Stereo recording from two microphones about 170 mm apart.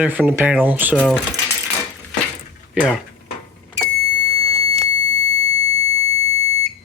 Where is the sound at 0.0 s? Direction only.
10° right (ahead or behind).